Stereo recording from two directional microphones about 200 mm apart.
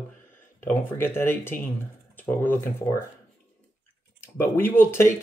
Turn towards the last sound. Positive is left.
turn(degrees=10)  # may be behind; listen again after turning